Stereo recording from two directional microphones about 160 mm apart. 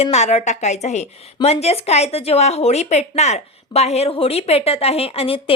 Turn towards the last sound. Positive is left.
turn(degrees=35)  # may be behind; listen again after turning